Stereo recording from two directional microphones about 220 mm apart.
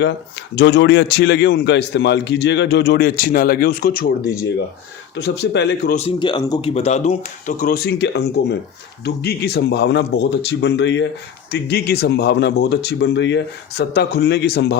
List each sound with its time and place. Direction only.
0.5 s a man's voice: 50° left (ahead or behind)
5.9 s a man's voice: 25° left (ahead or behind); by 14.8 s 50° left (ahead or behind)